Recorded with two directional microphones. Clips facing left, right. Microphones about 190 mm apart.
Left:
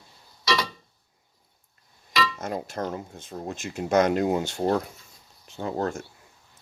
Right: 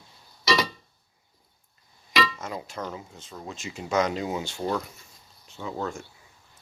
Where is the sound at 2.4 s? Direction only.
50° left (ahead or behind).